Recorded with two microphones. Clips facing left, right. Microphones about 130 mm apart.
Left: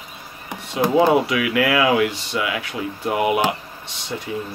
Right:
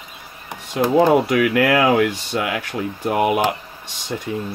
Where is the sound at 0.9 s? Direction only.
50° right (ahead or behind).